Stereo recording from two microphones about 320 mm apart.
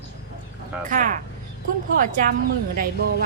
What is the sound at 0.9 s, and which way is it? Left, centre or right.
Speech, right.